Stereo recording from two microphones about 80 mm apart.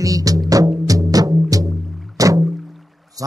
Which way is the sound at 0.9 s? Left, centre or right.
Right.